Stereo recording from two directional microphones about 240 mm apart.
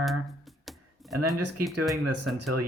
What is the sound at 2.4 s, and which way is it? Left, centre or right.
Speech, right.